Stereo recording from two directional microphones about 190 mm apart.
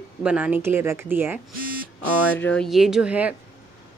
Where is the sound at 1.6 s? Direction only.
50° right (ahead or behind).